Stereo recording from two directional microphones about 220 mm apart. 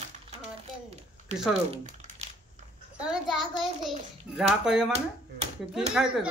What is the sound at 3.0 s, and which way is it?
A child's voice, centre (ahead or behind).